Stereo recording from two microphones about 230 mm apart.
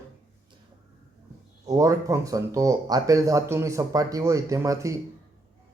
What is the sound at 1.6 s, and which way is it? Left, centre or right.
Speech, centre.